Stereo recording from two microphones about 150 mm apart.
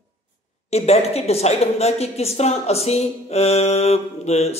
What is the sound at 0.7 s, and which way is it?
A woman's voice, 45° left (ahead or behind).